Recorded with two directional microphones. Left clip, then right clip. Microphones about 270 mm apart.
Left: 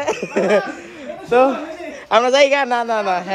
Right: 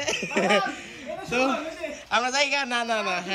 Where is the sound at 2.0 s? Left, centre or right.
Left.